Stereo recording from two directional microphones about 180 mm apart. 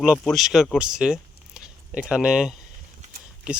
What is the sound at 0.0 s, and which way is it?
Speech, centre (ahead or behind).